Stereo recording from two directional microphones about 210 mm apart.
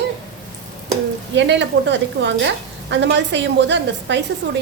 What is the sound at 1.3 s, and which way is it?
A woman's voice, 55° right (ahead or behind).